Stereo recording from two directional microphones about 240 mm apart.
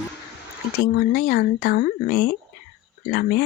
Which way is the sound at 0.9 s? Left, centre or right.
Left.